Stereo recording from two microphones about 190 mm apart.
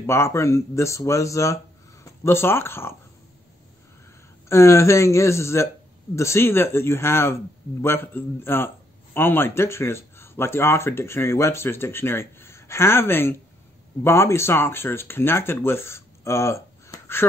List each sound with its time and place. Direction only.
0.0 s a man's voice: 15° left (ahead or behind)
4.5 s a man's voice: 15° left (ahead or behind)